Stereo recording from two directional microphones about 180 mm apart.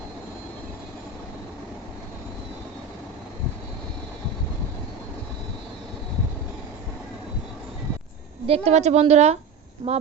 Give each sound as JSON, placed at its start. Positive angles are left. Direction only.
{"t": 8.4, "sound": "a woman's voice", "side_deg": -35}
{"t": 9.8, "sound": "speech", "side_deg": -25}